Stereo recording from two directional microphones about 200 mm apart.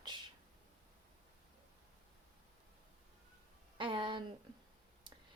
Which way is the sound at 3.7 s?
25° right (ahead or behind).